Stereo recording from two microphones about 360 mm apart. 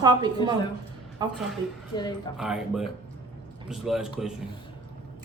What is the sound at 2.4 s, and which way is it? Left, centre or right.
Speech, centre.